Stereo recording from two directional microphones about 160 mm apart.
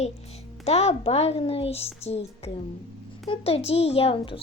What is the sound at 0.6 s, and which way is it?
A child's voice, 40° left (ahead or behind).